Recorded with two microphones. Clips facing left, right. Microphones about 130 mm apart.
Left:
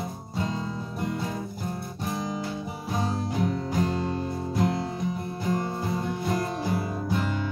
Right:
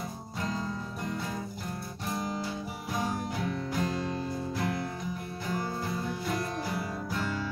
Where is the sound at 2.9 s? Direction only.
25° left (ahead or behind).